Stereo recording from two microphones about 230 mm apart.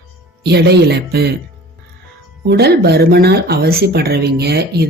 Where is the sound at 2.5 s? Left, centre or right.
Right.